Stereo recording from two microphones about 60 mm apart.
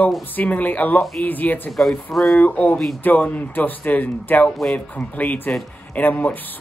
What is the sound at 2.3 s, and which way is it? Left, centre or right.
Speech, left.